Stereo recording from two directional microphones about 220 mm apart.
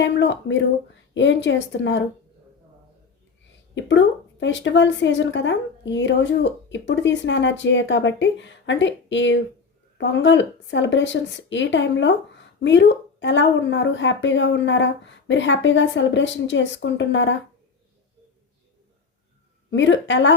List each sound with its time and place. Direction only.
0.0 s a woman's voice: 55° left (ahead or behind)
3.8 s a woman's voice: 55° left (ahead or behind)
19.7 s a woman's voice: 55° left (ahead or behind)